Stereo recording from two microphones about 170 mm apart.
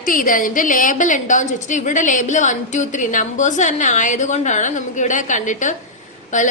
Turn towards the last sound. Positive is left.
turn(degrees=45)  # may be behind; listen again after turning